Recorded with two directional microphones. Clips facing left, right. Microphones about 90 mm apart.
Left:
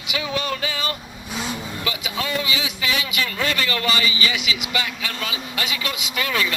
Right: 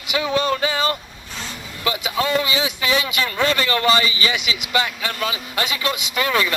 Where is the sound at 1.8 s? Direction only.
35° right (ahead or behind).